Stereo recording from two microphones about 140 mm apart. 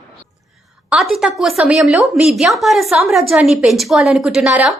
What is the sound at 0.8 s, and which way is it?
A woman's voice, centre (ahead or behind).